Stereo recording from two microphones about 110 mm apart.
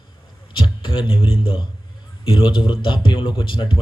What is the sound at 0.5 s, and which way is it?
A man's voice, 50° left (ahead or behind).